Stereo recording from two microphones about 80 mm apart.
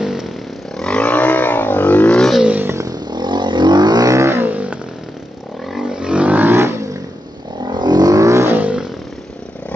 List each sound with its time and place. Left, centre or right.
0.0 s vehicle: centre
0.7 s vehicle: centre
2.4 s a sound: centre
2.9 s vehicle: right
4.1 s vehicle: right
5.7 s vehicle: centre; by 7.0 s right
7.6 s vehicle: right
8.5 s vehicle: centre